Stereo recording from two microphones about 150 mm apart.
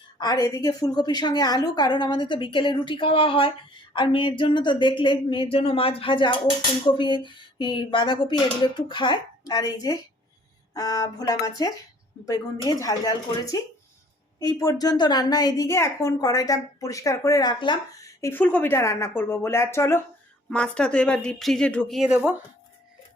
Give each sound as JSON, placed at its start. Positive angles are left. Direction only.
{"t": 0.2, "sound": "a woman's voice", "side_deg": 25}
{"t": 20.5, "sound": "speech", "side_deg": 5}